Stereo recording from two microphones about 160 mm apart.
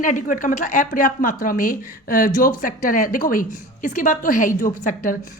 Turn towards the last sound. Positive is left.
turn(degrees=55)  # may be behind; listen again after turning